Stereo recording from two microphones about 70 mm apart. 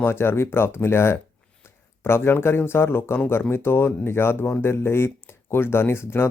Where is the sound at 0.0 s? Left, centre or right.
Left.